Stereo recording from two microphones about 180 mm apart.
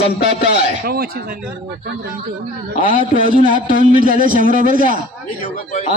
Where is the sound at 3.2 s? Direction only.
45° right (ahead or behind).